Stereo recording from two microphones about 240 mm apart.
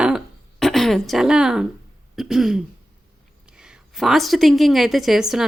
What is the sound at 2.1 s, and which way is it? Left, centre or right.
Throat clearing, centre.